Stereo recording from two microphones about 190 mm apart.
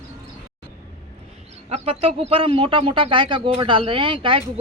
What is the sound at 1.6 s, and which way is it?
A man's voice, 30° right (ahead or behind).